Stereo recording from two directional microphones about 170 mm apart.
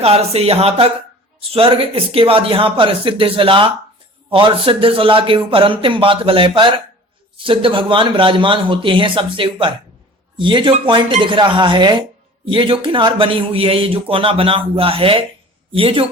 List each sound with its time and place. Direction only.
0.0 s speech: 35° right (ahead or behind)